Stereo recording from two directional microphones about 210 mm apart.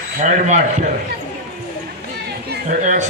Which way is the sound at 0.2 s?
35° right (ahead or behind).